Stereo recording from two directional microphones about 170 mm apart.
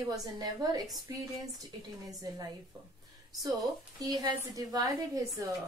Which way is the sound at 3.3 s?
20° right (ahead or behind).